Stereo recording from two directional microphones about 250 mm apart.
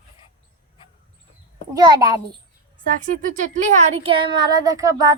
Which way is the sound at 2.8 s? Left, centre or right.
Right.